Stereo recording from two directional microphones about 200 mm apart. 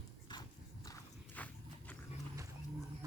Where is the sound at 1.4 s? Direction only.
5° left (ahead or behind).